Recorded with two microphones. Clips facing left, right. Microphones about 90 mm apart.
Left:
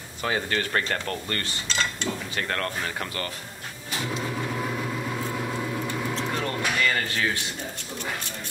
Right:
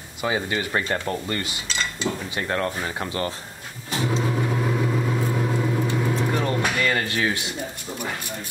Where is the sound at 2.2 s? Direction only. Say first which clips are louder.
Right 4 dB; 15° right (ahead or behind).